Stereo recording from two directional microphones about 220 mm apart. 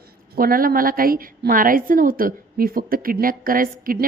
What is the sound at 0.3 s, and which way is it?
A woman's voice, 40° right (ahead or behind).